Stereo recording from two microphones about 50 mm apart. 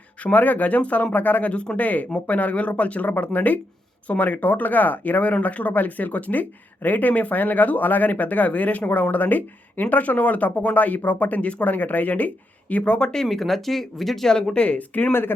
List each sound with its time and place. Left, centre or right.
0.2 s speech: left
13.2 s speech: centre
14.5 s speech: left